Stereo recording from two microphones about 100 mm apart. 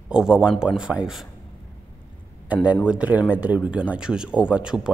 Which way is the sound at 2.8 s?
15° right (ahead or behind).